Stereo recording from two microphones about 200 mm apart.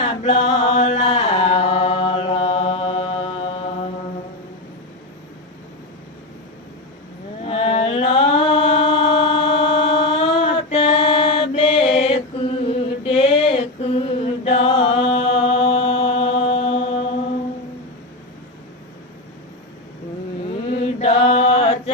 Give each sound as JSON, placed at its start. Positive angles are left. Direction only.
{"t": 0.0, "sound": "chant", "side_deg": 30}
{"t": 7.4, "sound": "mantra", "side_deg": 30}
{"t": 20.7, "sound": "mantra", "side_deg": 30}